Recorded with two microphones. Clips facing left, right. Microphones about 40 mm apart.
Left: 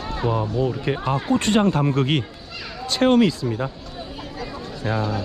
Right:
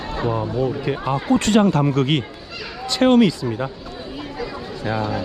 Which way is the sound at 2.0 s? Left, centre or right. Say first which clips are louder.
Right 2 dB; right.